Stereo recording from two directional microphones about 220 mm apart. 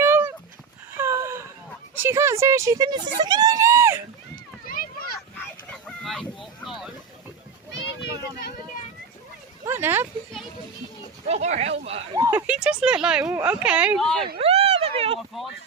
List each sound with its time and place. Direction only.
0.0 s dog: 10° right (ahead or behind)
0.9 s a sound: 10° right (ahead or behind)
2.0 s speech: 10° right (ahead or behind)
3.2 s screaming: 20° right (ahead or behind)
4.6 s a sound: 40° left (ahead or behind)
5.7 s fowl: centre (ahead or behind)
6.7 s speech: centre (ahead or behind)
9.6 s speech: 10° right (ahead or behind)
11.3 s speech: 30° right (ahead or behind)
12.2 s speech: 10° right (ahead or behind)
14.3 s a sound: 25° right (ahead or behind)